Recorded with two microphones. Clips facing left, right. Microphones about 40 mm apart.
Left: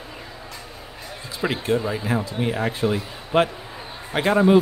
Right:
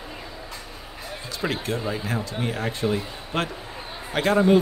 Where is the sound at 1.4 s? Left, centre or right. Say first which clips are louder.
Left 4 dB; centre.